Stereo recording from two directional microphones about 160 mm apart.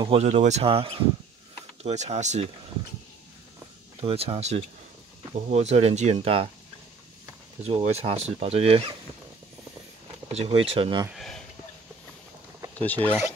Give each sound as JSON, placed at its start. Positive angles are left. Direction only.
{"t": 0.0, "sound": "speech", "side_deg": -40}
{"t": 4.0, "sound": "speech", "side_deg": -40}
{"t": 7.6, "sound": "speech", "side_deg": -40}
{"t": 10.2, "sound": "speech", "side_deg": -40}
{"t": 11.1, "sound": "speech", "side_deg": 0}
{"t": 12.7, "sound": "speech", "side_deg": 10}